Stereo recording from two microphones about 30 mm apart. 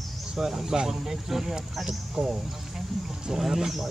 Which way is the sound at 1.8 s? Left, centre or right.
Right.